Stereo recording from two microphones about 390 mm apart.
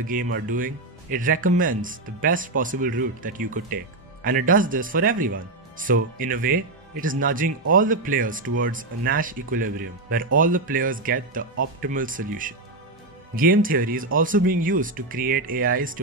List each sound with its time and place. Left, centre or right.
0.0 s speech: right